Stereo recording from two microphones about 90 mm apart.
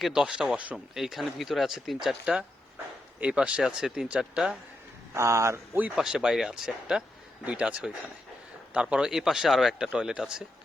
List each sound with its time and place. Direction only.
0.0 s speech: 5° right (ahead or behind)
5.1 s speech: 35° right (ahead or behind)
6.0 s speech: 5° right (ahead or behind)